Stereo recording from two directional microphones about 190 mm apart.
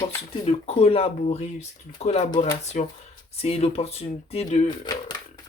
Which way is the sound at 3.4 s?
30° left (ahead or behind).